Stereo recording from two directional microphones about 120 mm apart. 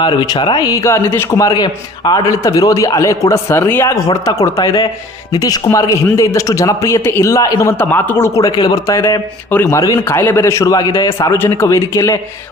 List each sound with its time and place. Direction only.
0.0 s a man's voice: 40° left (ahead or behind)